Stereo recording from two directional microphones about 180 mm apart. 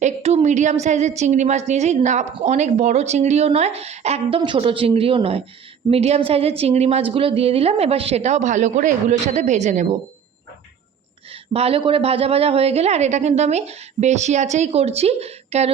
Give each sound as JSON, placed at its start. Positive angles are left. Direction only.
{"t": 0.0, "sound": "a woman's voice", "side_deg": -35}
{"t": 11.5, "sound": "a woman's voice", "side_deg": -35}